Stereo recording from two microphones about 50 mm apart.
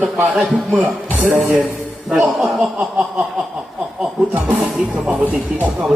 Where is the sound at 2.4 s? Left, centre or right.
Centre.